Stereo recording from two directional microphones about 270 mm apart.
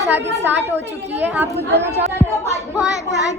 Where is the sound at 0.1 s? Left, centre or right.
Right.